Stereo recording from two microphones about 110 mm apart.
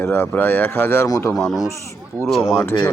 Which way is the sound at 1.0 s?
35° left (ahead or behind).